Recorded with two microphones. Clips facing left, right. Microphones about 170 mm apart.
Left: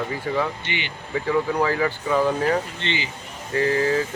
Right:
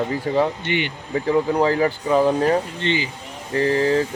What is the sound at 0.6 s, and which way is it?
Speech, 50° right (ahead or behind).